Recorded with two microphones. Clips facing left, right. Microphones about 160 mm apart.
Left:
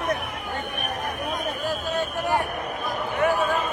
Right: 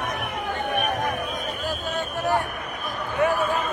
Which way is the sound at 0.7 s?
80° right.